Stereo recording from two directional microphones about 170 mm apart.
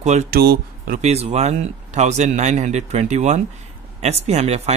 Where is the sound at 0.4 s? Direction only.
65° right (ahead or behind).